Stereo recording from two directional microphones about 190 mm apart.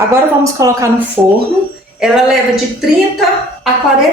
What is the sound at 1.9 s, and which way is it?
Speech, centre (ahead or behind).